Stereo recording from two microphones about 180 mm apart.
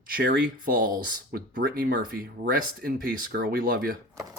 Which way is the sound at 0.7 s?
55° right (ahead or behind).